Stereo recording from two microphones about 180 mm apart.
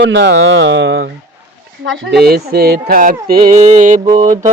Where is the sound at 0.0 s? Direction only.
75° right (ahead or behind).